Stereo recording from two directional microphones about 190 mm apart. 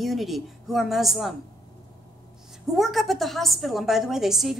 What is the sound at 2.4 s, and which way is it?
A woman's voice, centre (ahead or behind).